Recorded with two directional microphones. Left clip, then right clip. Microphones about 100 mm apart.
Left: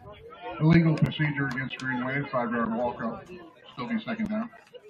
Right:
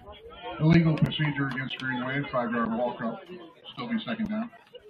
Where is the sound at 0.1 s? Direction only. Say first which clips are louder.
Even; 5° right (ahead or behind).